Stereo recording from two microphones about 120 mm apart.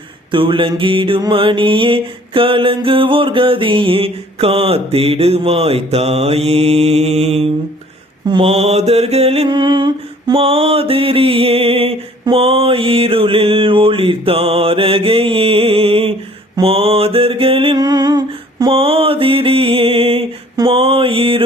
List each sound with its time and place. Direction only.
0.3 s music: 45° right (ahead or behind); by 7.5 s 60° right (ahead or behind)
8.2 s mantra: 45° right (ahead or behind)
9.5 s a sound: 40° right (ahead or behind)
10.4 s music: 55° right (ahead or behind)
16.6 s mantra: 55° right (ahead or behind)
17.7 s humming: 35° right (ahead or behind)
18.7 s mantra: 50° right (ahead or behind)